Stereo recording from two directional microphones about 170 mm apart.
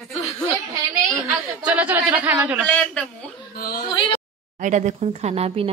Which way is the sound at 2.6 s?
10° left (ahead or behind).